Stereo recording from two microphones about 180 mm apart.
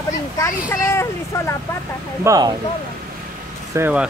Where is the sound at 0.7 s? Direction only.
15° left (ahead or behind).